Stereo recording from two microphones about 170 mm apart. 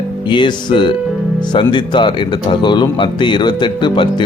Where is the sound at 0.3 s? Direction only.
25° left (ahead or behind).